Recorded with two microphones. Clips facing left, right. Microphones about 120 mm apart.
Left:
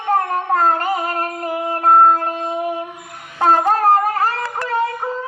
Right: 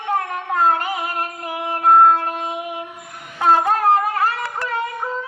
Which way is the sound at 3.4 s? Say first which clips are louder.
Left 2 dB; 30° left (ahead or behind).